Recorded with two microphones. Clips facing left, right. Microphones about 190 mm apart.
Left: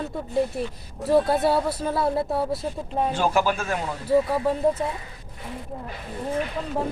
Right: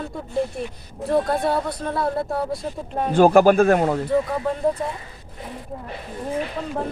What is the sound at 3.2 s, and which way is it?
Speech, 50° right (ahead or behind).